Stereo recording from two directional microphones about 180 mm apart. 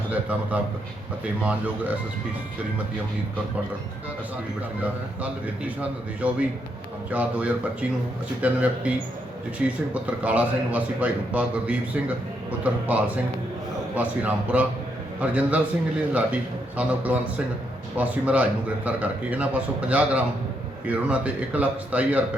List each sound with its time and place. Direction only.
0.1 s a man's voice: 10° right (ahead or behind)
4.8 s a man's voice: 10° right (ahead or behind)